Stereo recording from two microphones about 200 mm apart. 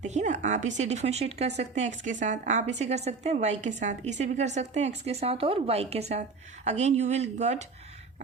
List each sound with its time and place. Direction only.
0.0 s a woman's voice: 35° right (ahead or behind)